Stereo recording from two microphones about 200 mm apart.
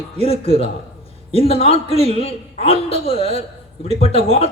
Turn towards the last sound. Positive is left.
turn(degrees=30)  # may be behind; listen again after turning